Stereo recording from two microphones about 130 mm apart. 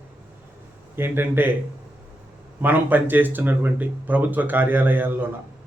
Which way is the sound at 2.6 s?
15° right (ahead or behind).